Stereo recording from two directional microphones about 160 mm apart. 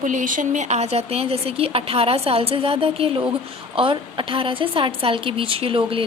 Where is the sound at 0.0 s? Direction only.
55° right (ahead or behind).